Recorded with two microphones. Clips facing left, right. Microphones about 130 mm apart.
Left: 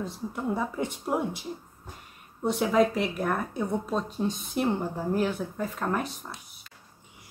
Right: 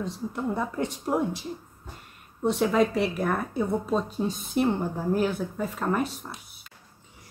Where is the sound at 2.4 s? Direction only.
Centre (ahead or behind).